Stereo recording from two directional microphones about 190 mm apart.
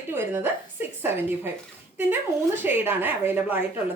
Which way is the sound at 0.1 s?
10° right (ahead or behind).